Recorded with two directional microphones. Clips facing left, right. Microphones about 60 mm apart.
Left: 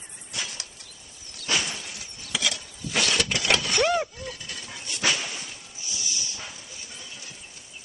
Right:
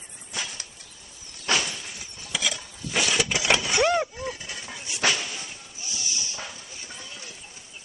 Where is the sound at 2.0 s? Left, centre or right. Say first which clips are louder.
Even; centre.